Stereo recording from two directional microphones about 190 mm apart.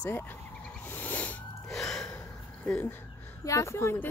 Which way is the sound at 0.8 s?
10° left (ahead or behind).